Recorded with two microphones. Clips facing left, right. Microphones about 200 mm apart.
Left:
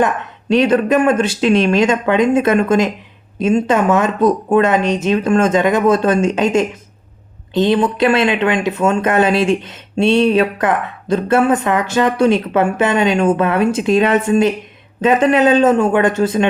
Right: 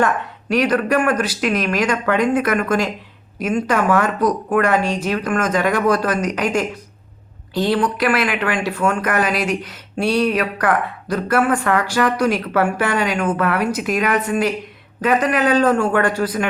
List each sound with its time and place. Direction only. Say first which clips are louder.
0.0 s speech: left 2 dB; 25° left (ahead or behind)